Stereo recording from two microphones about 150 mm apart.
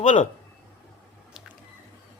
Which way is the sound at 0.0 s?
55° left (ahead or behind).